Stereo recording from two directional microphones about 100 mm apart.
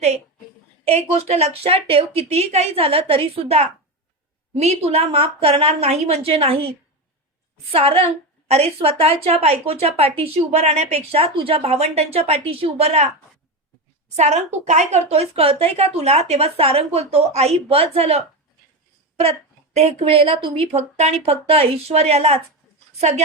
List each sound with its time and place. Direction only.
0.9 s a woman's voice: 90° right
9.8 s speech: 75° right (ahead or behind); by 13.1 s 90° right
15.1 s a woman's voice: 90° right